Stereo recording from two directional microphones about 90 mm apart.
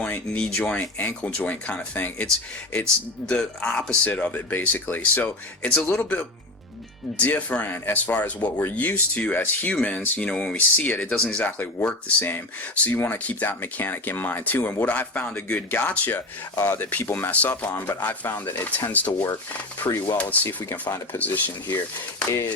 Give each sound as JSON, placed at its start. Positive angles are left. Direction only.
{"t": 0.0, "sound": "speech", "side_deg": 15}